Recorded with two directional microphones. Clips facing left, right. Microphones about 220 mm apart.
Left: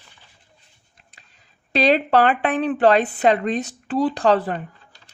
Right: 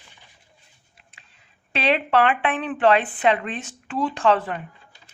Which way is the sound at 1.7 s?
40° left (ahead or behind).